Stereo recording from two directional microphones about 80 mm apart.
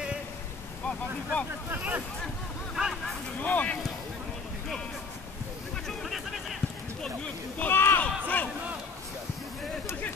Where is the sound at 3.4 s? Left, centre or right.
Centre.